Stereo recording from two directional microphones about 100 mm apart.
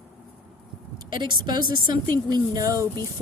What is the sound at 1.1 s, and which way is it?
A woman's voice, 50° right (ahead or behind).